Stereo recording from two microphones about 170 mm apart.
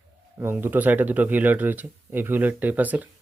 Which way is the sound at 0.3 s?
15° right (ahead or behind).